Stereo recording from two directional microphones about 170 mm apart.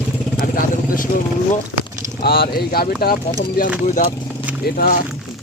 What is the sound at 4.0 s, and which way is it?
Speech, 50° left (ahead or behind).